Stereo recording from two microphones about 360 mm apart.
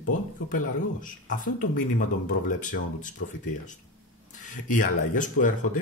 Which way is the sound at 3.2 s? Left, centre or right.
Left.